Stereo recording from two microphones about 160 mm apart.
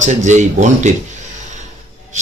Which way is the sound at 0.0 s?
50° right (ahead or behind).